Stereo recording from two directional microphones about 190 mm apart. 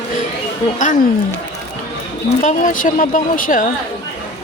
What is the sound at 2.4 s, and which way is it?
Speech, 40° left (ahead or behind).